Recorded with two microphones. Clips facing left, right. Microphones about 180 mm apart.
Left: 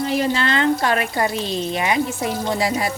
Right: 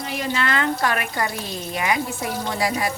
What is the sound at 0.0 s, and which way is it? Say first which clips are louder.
Speech: left 5 dB; 30° left (ahead or behind).